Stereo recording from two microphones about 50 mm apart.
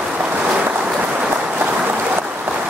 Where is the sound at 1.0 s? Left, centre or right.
Right.